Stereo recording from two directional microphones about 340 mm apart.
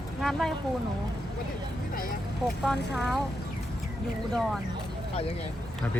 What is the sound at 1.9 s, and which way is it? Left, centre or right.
Vehicle, left.